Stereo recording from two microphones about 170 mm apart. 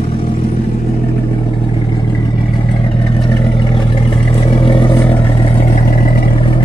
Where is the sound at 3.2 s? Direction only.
30° left (ahead or behind).